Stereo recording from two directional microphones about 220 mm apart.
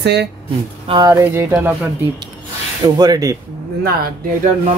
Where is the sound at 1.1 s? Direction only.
10° right (ahead or behind).